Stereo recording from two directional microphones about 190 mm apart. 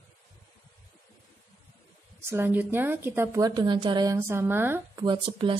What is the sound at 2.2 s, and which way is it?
A woman's voice, 10° right (ahead or behind).